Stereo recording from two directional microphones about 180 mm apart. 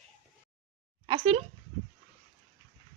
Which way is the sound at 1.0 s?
30° right (ahead or behind).